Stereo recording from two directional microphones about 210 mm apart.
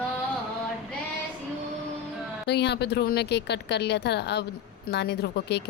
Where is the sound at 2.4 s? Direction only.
55° left (ahead or behind).